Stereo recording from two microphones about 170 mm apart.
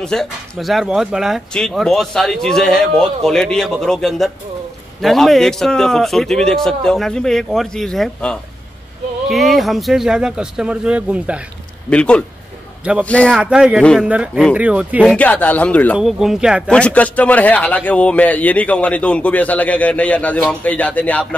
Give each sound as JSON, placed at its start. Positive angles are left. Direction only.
{"t": 0.0, "sound": "speech", "side_deg": 5}
{"t": 11.9, "sound": "a man's voice", "side_deg": 5}
{"t": 13.4, "sound": "speech", "side_deg": -5}
{"t": 15.0, "sound": "a man's voice", "side_deg": 10}
{"t": 16.0, "sound": "speech", "side_deg": 0}
{"t": 16.7, "sound": "a man's voice", "side_deg": 5}